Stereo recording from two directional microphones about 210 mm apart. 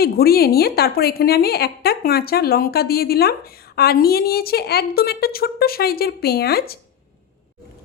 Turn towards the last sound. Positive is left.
turn(degrees=45)  # may be behind; listen again after turning